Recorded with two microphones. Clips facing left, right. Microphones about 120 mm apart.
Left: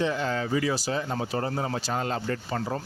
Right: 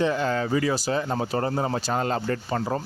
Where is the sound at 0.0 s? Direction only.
50° right (ahead or behind).